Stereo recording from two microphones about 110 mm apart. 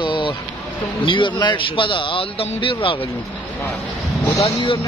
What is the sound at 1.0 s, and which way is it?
A man's voice, 50° left (ahead or behind).